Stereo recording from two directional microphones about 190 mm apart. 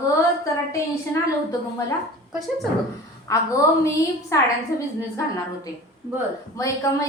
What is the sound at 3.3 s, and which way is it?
A woman's voice, 15° left (ahead or behind).